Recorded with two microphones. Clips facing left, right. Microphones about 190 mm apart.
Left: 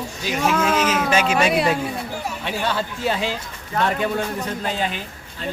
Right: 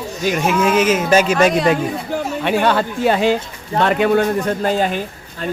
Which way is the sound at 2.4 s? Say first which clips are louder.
Right 8 dB; 65° right (ahead or behind).